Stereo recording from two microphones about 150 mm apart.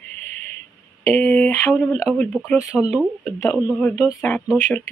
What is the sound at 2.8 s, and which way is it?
Speech, 5° right (ahead or behind).